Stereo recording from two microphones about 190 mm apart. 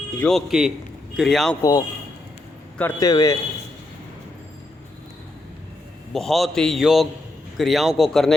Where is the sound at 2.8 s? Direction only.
20° left (ahead or behind).